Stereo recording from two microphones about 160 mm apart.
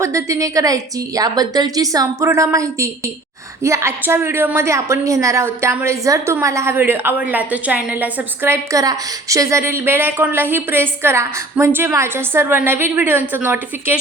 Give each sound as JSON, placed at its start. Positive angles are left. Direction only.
{"t": 0.0, "sound": "a woman's voice", "side_deg": -20}